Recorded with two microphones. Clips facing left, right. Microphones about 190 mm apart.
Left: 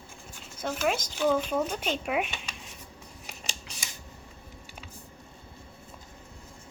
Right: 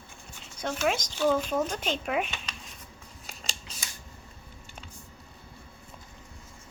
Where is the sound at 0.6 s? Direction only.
5° left (ahead or behind).